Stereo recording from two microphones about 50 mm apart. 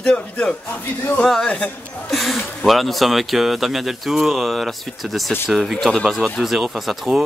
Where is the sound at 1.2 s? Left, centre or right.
Centre.